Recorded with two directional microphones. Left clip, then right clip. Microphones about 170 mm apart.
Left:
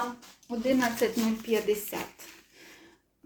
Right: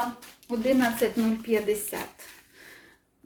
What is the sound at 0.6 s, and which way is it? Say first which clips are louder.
A woman's voice: right 2 dB; centre (ahead or behind).